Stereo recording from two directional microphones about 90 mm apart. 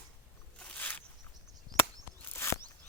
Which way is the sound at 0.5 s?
15° left (ahead or behind).